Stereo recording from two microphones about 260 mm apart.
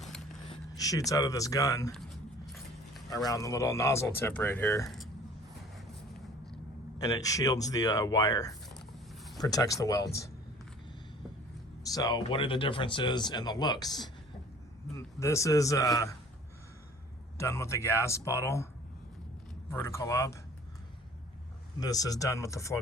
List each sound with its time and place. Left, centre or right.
0.4 s speech: centre
3.2 s speech: centre
7.0 s speech: centre
11.8 s speech: centre
17.3 s speech: centre
19.7 s speech: centre
21.8 s speech: centre